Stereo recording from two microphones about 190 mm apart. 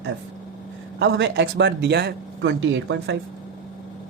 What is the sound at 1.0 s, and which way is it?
Speech, 65° right (ahead or behind).